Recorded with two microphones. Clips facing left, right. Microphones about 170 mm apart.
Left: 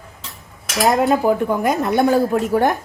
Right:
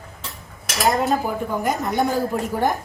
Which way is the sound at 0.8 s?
Centre (ahead or behind).